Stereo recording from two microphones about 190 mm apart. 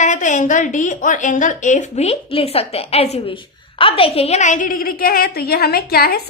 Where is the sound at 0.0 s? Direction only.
40° left (ahead or behind).